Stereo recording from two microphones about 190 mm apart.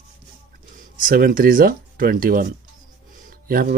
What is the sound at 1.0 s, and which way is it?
Speech, 45° right (ahead or behind).